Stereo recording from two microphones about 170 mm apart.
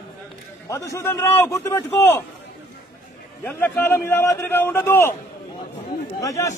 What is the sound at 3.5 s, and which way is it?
Speech, 15° left (ahead or behind).